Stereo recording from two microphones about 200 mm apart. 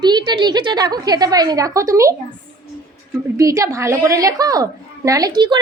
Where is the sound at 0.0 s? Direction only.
20° right (ahead or behind).